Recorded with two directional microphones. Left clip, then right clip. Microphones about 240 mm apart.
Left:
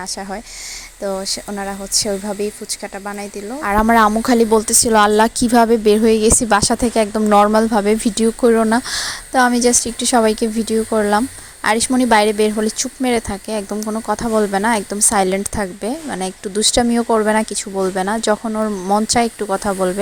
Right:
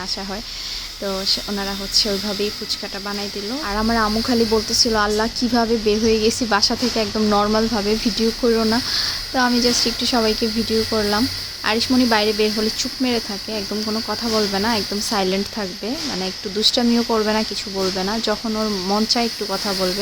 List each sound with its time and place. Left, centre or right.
1.0 s speech: left
3.6 s a woman's voice: left